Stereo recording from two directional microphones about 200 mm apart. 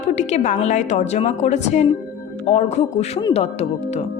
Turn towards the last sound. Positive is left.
turn(degrees=30)  # may be behind; listen again after turning